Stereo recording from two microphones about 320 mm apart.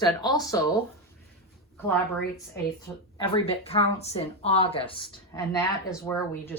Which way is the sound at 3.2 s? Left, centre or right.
Centre.